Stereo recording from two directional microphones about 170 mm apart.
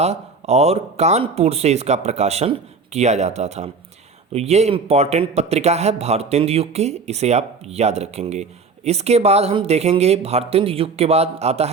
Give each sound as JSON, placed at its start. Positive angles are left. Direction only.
{"t": 0.0, "sound": "speech", "side_deg": -40}